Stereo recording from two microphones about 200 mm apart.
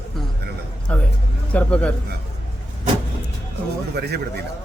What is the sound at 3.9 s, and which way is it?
Speech, 55° right (ahead or behind).